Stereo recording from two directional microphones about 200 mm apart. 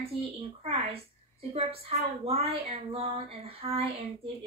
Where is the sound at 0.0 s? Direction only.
30° right (ahead or behind).